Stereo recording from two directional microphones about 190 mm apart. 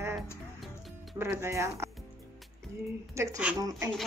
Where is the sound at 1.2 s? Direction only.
15° right (ahead or behind).